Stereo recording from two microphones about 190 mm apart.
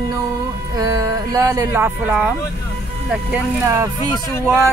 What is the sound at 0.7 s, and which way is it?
Speech, 20° right (ahead or behind).